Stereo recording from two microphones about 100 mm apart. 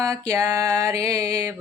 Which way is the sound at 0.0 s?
30° right (ahead or behind).